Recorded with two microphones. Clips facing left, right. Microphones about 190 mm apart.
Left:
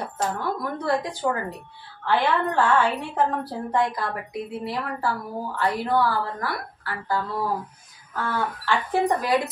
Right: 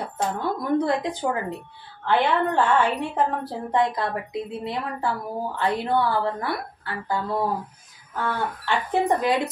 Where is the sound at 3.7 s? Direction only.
20° right (ahead or behind).